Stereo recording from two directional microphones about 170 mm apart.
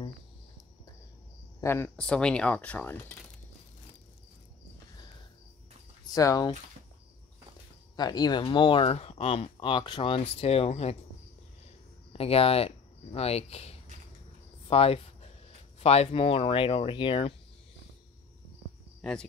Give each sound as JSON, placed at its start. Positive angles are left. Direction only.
{"t": 1.6, "sound": "speech", "side_deg": 15}
{"t": 6.1, "sound": "speech", "side_deg": 20}
{"t": 7.9, "sound": "speech", "side_deg": 25}
{"t": 12.1, "sound": "speech", "side_deg": 35}
{"t": 14.7, "sound": "a sound", "side_deg": 35}
{"t": 15.8, "sound": "speech", "side_deg": 35}
{"t": 18.9, "sound": "speech", "side_deg": 5}